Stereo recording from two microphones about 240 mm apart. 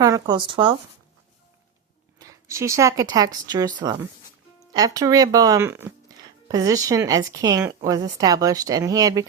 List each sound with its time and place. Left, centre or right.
0.0 s speech: centre
2.1 s speech: centre